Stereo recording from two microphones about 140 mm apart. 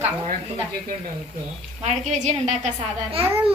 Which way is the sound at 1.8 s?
55° right (ahead or behind).